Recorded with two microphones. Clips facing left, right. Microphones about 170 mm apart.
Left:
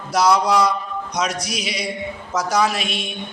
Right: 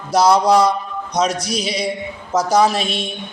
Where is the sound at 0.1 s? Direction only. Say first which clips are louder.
Right 4 dB; 25° right (ahead or behind).